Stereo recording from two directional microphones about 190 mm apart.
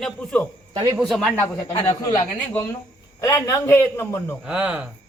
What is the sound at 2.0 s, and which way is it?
A man's voice, 15° left (ahead or behind).